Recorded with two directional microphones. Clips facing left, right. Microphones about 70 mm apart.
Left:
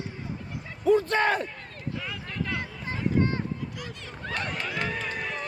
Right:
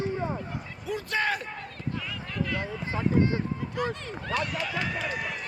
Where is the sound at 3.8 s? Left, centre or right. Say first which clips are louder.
Right 10 dB; right.